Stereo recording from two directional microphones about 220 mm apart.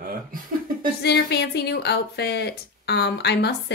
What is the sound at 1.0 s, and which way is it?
A woman's voice, 50° left (ahead or behind).